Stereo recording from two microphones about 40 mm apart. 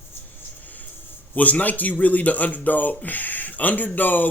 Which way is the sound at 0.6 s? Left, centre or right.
Left.